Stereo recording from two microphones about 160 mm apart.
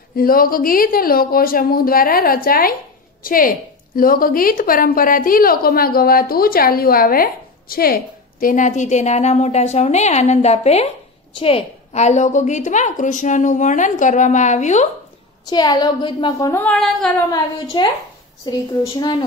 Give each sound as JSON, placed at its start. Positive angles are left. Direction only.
{"t": 0.1, "sound": "a woman's voice", "side_deg": 65}
{"t": 15.4, "sound": "a woman's voice", "side_deg": 25}
{"t": 16.5, "sound": "a sound", "side_deg": 5}
{"t": 17.8, "sound": "a woman's voice", "side_deg": 30}